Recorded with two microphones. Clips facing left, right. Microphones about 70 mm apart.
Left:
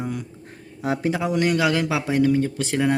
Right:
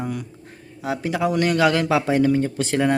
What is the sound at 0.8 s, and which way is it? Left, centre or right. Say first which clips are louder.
Speech: left 2 dB; left.